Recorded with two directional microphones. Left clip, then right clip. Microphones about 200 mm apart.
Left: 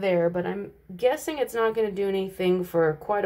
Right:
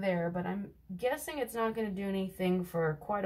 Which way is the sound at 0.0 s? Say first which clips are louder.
Left 10 dB; 10° left (ahead or behind).